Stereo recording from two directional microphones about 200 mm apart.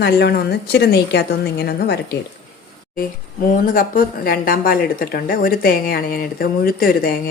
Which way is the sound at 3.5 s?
45° left (ahead or behind).